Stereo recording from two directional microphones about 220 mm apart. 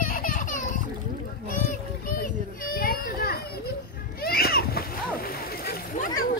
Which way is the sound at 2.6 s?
40° left (ahead or behind).